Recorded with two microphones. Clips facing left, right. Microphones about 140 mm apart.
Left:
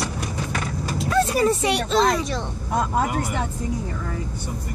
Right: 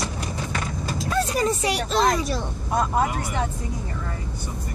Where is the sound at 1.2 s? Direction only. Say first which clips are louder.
Left 3 dB; 5° left (ahead or behind).